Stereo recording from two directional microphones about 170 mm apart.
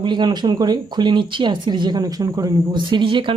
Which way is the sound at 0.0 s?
25° right (ahead or behind).